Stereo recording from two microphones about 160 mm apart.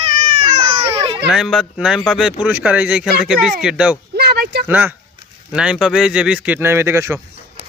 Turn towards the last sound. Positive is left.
turn(degrees=-15)  # may be behind; listen again after turning